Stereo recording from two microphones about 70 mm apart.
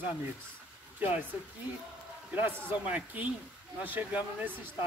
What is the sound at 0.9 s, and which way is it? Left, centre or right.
Speech, right.